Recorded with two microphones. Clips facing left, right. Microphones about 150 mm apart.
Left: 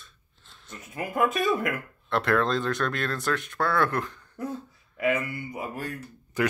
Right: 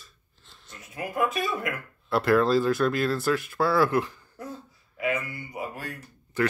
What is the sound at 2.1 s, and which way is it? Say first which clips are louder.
Speech: right 3 dB; 5° right (ahead or behind).